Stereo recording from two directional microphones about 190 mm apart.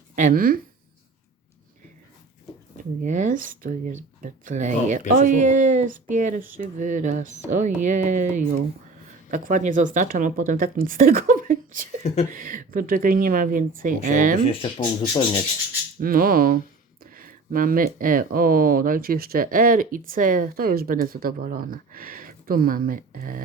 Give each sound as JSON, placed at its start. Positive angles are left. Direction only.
{"t": 0.2, "sound": "speech", "side_deg": -45}
{"t": 3.0, "sound": "speech", "side_deg": -40}
{"t": 14.4, "sound": "speech", "side_deg": 30}
{"t": 16.0, "sound": "speech", "side_deg": -50}